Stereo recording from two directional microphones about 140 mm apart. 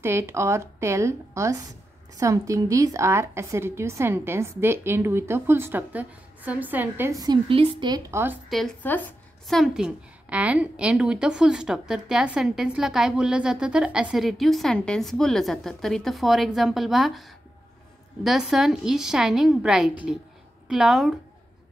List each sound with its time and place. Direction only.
0.0 s a woman's voice: 15° right (ahead or behind)
7.4 s a woman's voice: 40° right (ahead or behind)
8.1 s a woman's voice: 15° right (ahead or behind)
8.5 s speech: centre (ahead or behind)
8.8 s speech: 15° left (ahead or behind)
9.5 s a woman's voice: centre (ahead or behind)
18.2 s a woman's voice: centre (ahead or behind)